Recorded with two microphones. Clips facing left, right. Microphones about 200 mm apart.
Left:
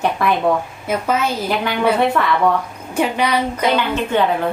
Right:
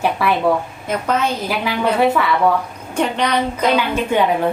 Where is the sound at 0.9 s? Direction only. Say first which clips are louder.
Even; 5° left (ahead or behind).